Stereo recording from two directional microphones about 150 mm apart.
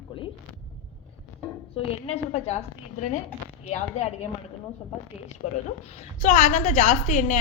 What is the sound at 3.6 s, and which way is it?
Speech, 45° left (ahead or behind).